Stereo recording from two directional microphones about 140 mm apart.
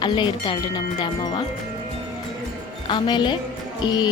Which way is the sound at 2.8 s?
35° left (ahead or behind).